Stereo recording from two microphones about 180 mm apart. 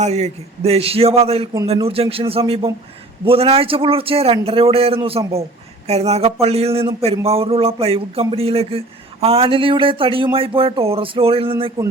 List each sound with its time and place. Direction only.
0.0 s a man's voice: 35° right (ahead or behind)